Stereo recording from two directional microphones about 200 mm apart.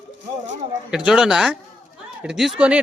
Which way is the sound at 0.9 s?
5° right (ahead or behind).